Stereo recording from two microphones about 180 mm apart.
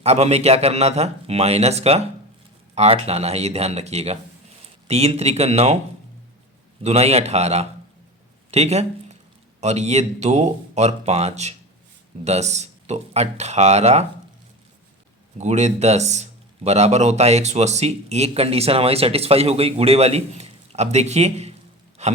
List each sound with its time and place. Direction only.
0.0 s speech: 35° right (ahead or behind)
6.8 s speech: 35° right (ahead or behind)
15.4 s speech: 40° right (ahead or behind)